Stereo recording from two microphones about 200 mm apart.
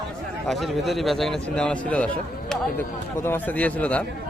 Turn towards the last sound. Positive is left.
turn(degrees=5)  # may be behind; listen again after turning